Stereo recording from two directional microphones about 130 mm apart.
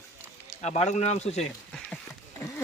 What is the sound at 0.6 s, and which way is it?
Speech, 60° left (ahead or behind).